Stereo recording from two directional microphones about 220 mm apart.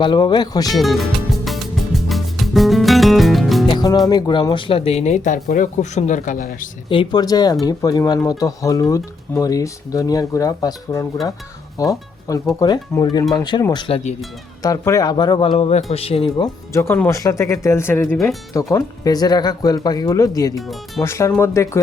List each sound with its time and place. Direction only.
0.0 s speech: 20° left (ahead or behind)
0.8 s music: centre (ahead or behind)
3.7 s music: 20° left (ahead or behind)
4.1 s speech: 20° left (ahead or behind); by 6.7 s 40° left (ahead or behind)
6.8 s speech: 20° left (ahead or behind)
14.6 s speech: 15° left (ahead or behind)